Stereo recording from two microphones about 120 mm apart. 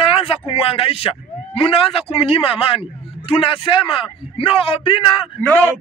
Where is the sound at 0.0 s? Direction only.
50° left (ahead or behind).